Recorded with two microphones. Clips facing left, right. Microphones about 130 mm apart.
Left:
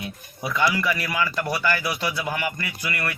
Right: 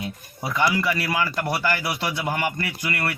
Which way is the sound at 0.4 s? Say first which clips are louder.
Right 1 dB; 25° right (ahead or behind).